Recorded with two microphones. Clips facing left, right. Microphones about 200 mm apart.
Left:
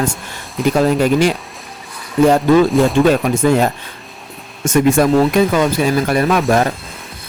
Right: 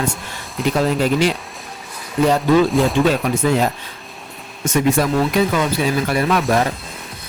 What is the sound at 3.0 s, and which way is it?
Speech, 50° left (ahead or behind).